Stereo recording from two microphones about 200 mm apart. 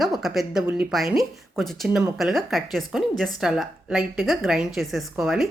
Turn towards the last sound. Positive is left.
turn(degrees=0)  # may be behind; listen again after turning